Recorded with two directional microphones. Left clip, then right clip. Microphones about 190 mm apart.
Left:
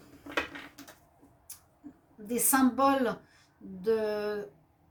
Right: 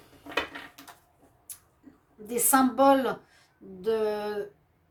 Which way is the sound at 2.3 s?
50° right (ahead or behind).